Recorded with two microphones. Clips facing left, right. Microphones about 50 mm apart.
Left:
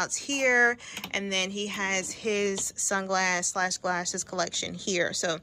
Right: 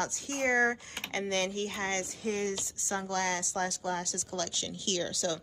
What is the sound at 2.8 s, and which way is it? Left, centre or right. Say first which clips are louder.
A woman's voice: left 6 dB; left.